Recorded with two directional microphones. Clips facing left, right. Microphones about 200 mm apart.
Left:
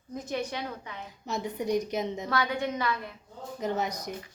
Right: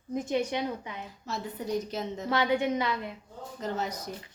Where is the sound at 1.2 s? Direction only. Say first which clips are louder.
Left 4 dB; 15° left (ahead or behind).